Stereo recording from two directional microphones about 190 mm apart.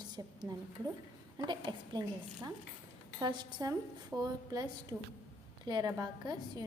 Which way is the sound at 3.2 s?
25° right (ahead or behind).